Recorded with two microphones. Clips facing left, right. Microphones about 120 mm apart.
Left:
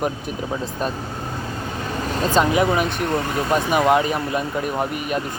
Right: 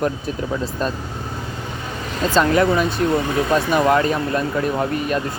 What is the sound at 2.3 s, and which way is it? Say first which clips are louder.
Speech: right 2 dB; 15° left (ahead or behind).